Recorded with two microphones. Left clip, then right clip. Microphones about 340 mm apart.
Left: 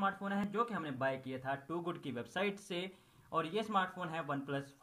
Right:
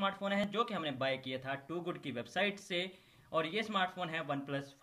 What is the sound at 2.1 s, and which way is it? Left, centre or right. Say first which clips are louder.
Speech: right 1 dB; centre.